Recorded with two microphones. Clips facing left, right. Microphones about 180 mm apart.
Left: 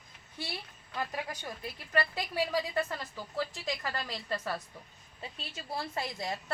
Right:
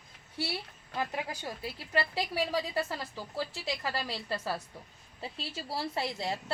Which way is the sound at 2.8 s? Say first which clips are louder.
Even; 30° right (ahead or behind).